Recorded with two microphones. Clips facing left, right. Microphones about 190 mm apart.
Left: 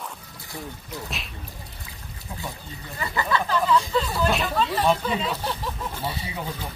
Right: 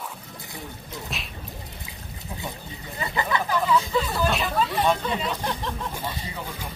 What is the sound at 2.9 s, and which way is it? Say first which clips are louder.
Speech: left 1 dB; 20° right (ahead or behind).